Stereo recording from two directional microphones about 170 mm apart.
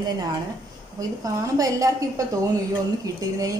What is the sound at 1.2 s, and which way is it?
A woman's voice, 20° right (ahead or behind).